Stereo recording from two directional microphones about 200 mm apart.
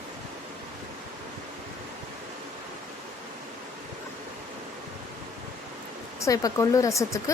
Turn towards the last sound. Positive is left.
turn(degrees=15)  # may be behind; listen again after turning